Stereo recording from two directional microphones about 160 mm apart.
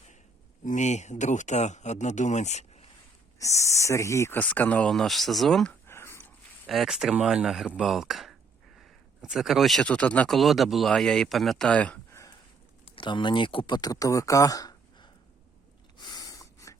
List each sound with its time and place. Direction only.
0.6 s speech: 50° left (ahead or behind)
3.3 s speech: 20° left (ahead or behind); by 5.7 s centre (ahead or behind)
5.8 s a sound: 15° left (ahead or behind)
6.7 s speech: centre (ahead or behind)
13.0 s speech: 30° left (ahead or behind)
16.0 s snort: 25° left (ahead or behind)